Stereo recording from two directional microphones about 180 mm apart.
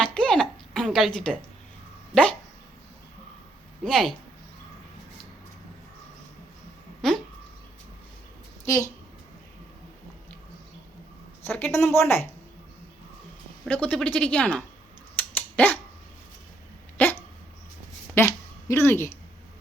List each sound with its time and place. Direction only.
0.0 s a sound: 5° left (ahead or behind)
3.8 s speech: centre (ahead or behind)
8.6 s a woman's voice: 15° left (ahead or behind)
11.4 s speech: 10° left (ahead or behind)
13.7 s speech: 5° left (ahead or behind)
15.2 s dog: 10° left (ahead or behind)
17.0 s dog: 10° left (ahead or behind)
18.2 s speech: 15° left (ahead or behind)